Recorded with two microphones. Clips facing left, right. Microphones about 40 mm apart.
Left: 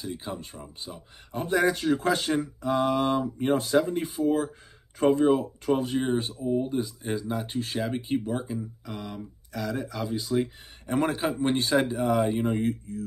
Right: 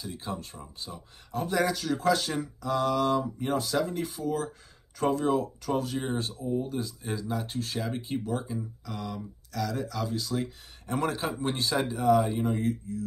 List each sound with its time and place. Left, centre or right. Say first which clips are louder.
0.0 s speech: left 1 dB; centre